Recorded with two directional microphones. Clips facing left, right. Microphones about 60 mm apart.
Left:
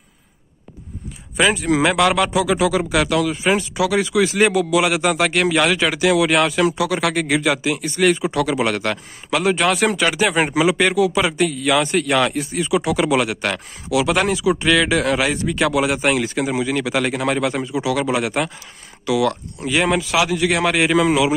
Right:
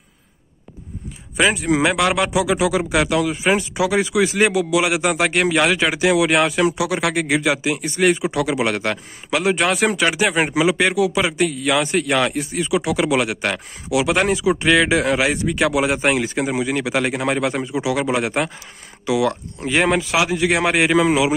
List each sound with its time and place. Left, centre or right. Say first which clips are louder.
1.3 s speech: even; centre
15.9 s speech: even; right
20.1 s speech: even; right